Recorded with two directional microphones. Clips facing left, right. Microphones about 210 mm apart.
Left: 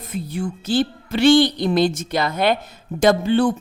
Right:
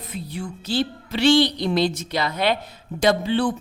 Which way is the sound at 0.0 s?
45° left (ahead or behind).